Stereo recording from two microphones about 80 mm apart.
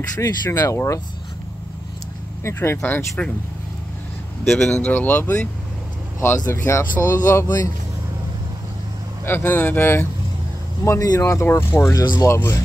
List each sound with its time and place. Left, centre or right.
0.2 s speech: left
2.4 s speech: left
4.5 s speech: centre
6.6 s speech: left
7.4 s speech: left
9.2 s speech: left
10.8 s speech: left
12.0 s speech: left
12.3 s speech: left